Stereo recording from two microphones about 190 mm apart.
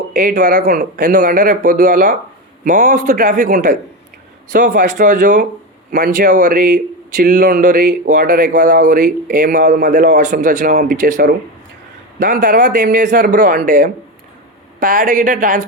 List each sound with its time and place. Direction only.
0.1 s a man's voice: 45° right (ahead or behind)